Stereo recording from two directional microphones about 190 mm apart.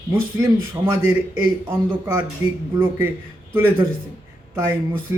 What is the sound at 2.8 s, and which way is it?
Speech, 10° right (ahead or behind).